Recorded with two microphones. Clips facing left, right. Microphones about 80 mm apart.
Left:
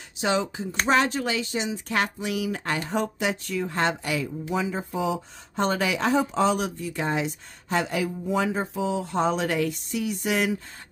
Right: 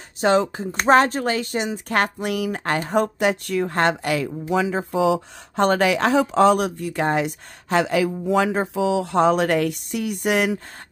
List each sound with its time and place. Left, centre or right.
0.2 s speech: right